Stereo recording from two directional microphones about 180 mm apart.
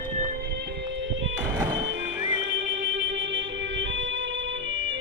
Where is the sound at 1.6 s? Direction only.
10° right (ahead or behind).